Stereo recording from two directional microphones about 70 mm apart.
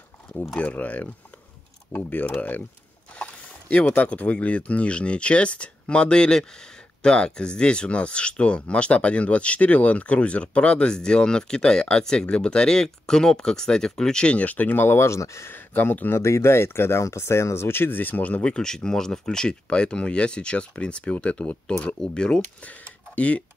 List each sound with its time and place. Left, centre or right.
0.6 s speech: left
2.0 s speech: left
15.5 s speech: left
16.2 s speech: left; by 23.4 s centre